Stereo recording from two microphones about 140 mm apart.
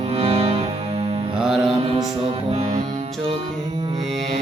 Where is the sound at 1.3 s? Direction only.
Centre (ahead or behind).